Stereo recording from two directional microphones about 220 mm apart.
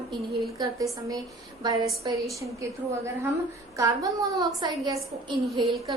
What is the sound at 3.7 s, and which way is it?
A woman's voice, 15° right (ahead or behind).